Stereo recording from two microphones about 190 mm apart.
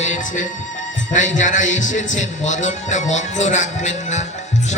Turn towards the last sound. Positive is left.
turn(degrees=40)  # may be behind; listen again after turning